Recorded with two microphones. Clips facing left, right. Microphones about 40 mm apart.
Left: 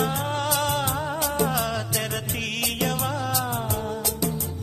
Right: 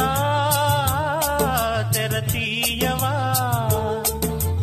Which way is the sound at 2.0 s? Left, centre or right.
Right.